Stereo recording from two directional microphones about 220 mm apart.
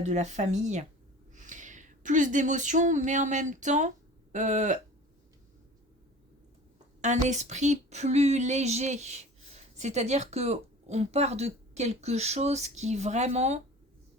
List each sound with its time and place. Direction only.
0.0 s a woman's voice: 35° right (ahead or behind)
7.0 s a woman's voice: 35° right (ahead or behind)